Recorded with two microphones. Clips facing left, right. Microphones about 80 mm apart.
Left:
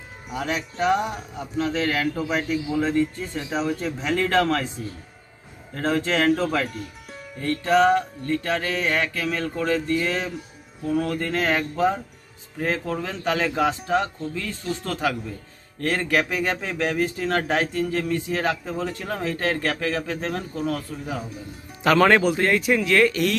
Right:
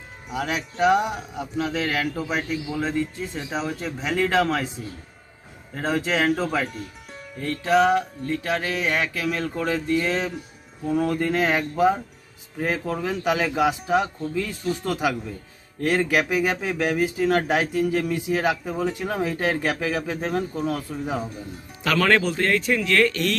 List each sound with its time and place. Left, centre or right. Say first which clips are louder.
0.3 s speech: even; centre
5.7 s speech: left 1 dB; centre
21.8 s speech: left 5 dB; left
22.1 s speech: left 2 dB; centre